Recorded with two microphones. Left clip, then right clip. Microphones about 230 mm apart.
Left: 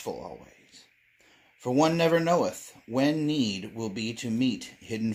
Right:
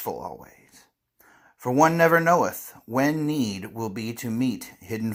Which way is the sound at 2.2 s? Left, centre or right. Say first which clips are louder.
Right 5 dB; right.